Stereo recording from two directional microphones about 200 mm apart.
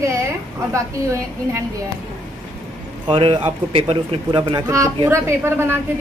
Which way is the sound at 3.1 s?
25° right (ahead or behind).